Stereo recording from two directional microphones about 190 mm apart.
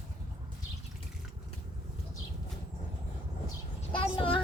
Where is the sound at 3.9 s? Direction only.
30° left (ahead or behind).